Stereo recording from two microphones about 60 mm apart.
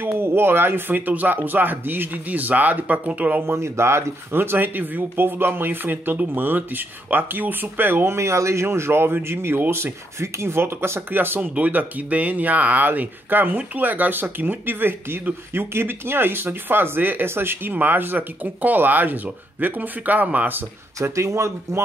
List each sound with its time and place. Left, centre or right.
0.0 s speech: right
3.4 s speech: right
21.0 s speech: right